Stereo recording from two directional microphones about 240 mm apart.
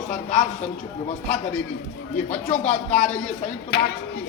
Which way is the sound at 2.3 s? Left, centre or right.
Left.